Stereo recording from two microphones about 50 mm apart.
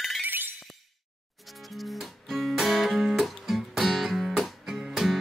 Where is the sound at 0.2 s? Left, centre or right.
Right.